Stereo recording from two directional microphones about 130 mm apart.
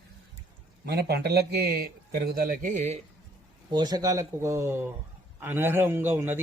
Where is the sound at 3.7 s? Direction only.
30° right (ahead or behind).